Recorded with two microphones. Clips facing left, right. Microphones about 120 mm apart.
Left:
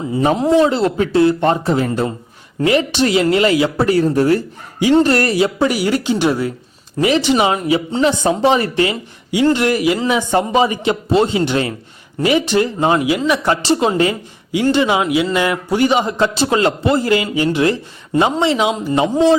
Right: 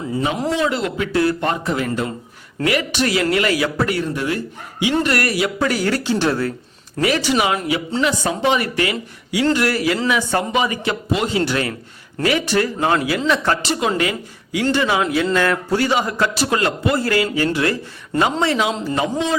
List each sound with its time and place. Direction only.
0.5 s a man's voice: 30° left (ahead or behind); by 13.6 s 15° left (ahead or behind)
13.7 s a woman's voice: 30° left (ahead or behind)